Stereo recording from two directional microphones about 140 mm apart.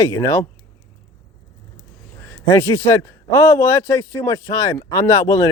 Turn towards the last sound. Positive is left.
turn(degrees=20)  # may be behind; listen again after turning